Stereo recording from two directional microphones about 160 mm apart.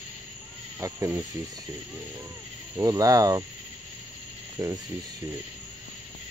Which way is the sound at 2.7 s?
20° right (ahead or behind).